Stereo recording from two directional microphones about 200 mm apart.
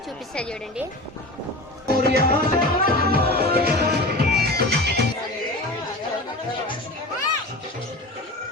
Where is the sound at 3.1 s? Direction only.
50° right (ahead or behind).